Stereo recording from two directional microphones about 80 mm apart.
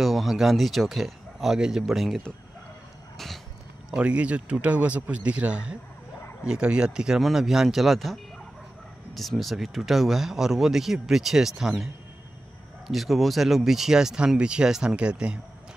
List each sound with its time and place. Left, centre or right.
0.0 s speech: centre
3.9 s speech: centre